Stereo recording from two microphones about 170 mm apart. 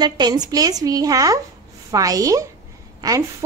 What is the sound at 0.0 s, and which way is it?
A woman's voice, 25° right (ahead or behind).